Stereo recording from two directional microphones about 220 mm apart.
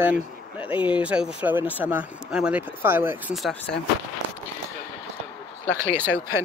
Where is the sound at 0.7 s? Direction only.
20° left (ahead or behind).